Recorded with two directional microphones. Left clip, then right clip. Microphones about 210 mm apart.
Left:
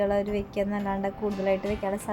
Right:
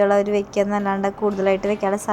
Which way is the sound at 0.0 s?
15° right (ahead or behind).